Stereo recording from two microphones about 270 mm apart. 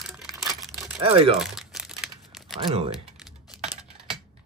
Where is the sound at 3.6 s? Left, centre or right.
Centre.